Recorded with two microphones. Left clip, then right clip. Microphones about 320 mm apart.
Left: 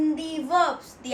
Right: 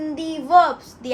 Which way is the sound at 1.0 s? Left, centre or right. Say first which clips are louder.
Right 5 dB; right.